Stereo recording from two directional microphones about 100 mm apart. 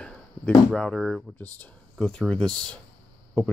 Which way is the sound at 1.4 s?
10° left (ahead or behind).